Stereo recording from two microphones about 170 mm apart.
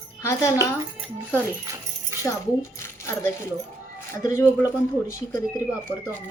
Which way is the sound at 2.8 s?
15° left (ahead or behind).